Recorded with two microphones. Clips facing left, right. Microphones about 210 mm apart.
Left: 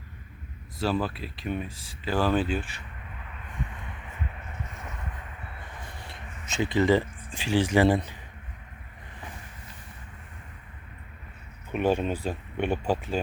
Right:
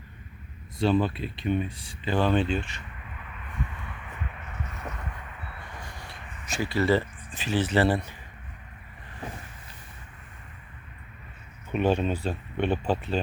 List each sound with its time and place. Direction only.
0.8 s speech: centre (ahead or behind)
5.8 s a sound: 20° left (ahead or behind)
11.7 s speech: 10° left (ahead or behind)